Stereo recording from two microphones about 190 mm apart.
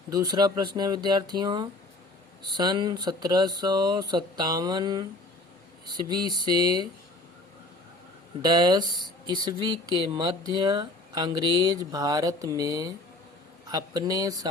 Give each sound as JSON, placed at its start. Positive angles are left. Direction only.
{"t": 0.1, "sound": "speech", "side_deg": -20}
{"t": 6.1, "sound": "speech", "side_deg": -20}
{"t": 8.4, "sound": "speech", "side_deg": -20}